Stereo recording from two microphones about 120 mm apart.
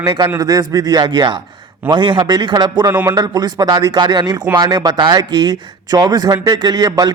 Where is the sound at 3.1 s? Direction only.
35° right (ahead or behind).